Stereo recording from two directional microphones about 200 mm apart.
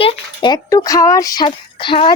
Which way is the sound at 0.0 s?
25° left (ahead or behind).